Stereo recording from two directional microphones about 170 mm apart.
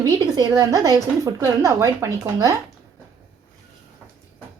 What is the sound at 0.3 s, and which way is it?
A woman's voice, 20° right (ahead or behind).